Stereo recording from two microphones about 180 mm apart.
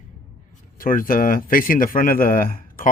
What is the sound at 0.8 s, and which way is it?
Speech, 50° left (ahead or behind).